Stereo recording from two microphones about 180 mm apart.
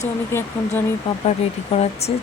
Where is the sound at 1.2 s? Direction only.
35° left (ahead or behind).